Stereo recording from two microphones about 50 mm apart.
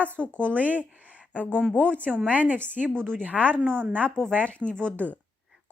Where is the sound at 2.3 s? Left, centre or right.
Right.